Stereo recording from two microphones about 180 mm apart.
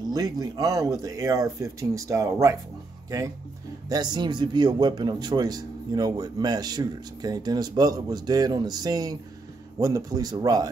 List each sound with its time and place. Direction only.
0.1 s speech: 20° right (ahead or behind)
3.9 s speech: 25° right (ahead or behind)